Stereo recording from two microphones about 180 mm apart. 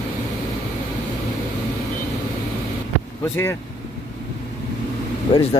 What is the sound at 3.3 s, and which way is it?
Speech, 15° left (ahead or behind).